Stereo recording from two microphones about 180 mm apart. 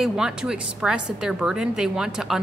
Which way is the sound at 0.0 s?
5° right (ahead or behind).